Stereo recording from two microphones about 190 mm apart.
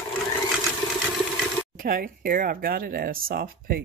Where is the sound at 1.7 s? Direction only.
50° right (ahead or behind).